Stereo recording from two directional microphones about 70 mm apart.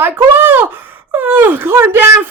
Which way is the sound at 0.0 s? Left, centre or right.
Right.